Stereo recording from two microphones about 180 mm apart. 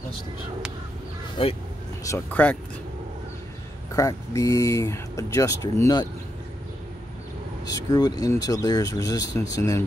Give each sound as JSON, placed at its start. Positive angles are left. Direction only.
{"t": 1.4, "sound": "speech", "side_deg": 30}
{"t": 2.0, "sound": "speech", "side_deg": 10}
{"t": 3.9, "sound": "speech", "side_deg": 15}
{"t": 7.6, "sound": "speech", "side_deg": 20}